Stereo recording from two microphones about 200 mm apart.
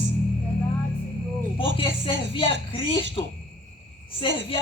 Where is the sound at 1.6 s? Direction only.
25° left (ahead or behind).